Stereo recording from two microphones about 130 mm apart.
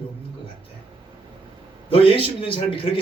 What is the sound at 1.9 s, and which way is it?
Speech, 45° left (ahead or behind).